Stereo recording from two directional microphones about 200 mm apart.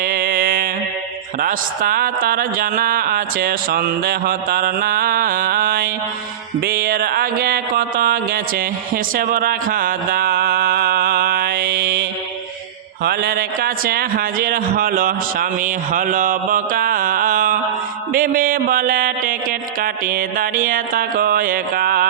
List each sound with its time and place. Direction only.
0.0 s mantra: 50° right (ahead or behind)
1.4 s a man's voice: 45° right (ahead or behind)
6.7 s music: 50° right (ahead or behind)
13.1 s a man's voice: 50° right (ahead or behind)
18.1 s a sound: 45° right (ahead or behind)